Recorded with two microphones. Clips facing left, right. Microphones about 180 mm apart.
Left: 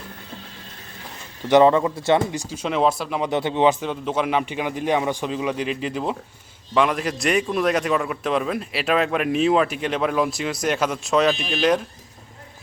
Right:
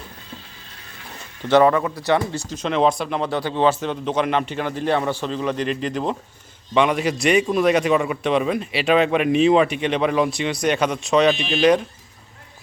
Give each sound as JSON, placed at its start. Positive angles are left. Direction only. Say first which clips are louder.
{"t": 1.5, "sound": "a man's voice", "louder": "left 1 dB", "side_deg": 20}
{"t": 3.2, "sound": "a man's voice", "louder": "left 1 dB", "side_deg": 20}